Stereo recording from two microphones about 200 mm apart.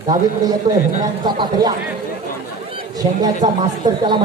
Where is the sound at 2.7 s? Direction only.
20° right (ahead or behind).